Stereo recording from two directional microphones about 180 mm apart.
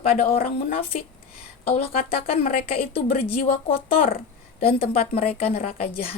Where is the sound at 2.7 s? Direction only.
55° left (ahead or behind).